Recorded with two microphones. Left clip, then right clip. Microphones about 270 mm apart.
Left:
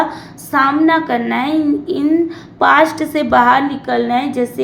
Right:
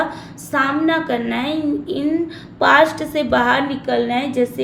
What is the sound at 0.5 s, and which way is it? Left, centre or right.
A woman's voice, centre.